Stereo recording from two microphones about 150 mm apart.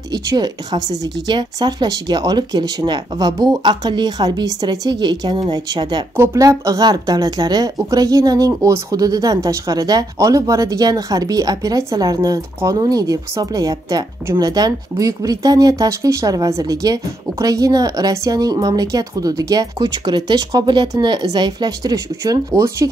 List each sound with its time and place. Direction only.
0.1 s speech: 25° right (ahead or behind)